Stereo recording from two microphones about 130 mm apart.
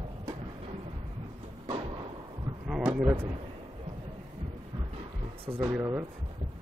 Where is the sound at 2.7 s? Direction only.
5° right (ahead or behind).